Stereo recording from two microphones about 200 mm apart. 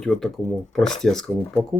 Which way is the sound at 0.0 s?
Centre (ahead or behind).